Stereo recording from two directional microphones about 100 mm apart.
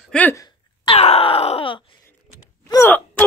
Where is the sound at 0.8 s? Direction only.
90° left; by 1.8 s 70° left (ahead or behind).